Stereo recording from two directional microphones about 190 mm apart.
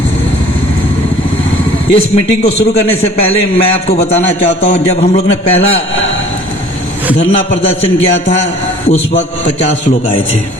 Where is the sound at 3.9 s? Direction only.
35° left (ahead or behind).